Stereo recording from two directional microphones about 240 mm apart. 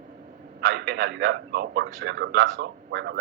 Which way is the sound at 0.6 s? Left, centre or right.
Right.